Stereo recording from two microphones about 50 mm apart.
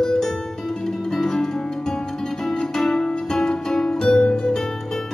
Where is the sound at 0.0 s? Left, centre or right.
Centre.